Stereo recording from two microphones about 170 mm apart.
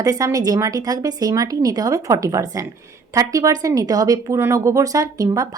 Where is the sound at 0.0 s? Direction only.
20° right (ahead or behind).